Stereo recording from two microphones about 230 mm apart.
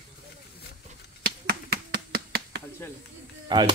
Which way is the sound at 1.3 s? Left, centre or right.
Right.